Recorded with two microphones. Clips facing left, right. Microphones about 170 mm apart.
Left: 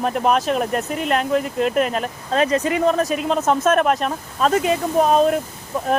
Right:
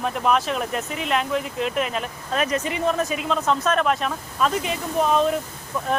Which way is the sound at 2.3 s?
30° left (ahead or behind).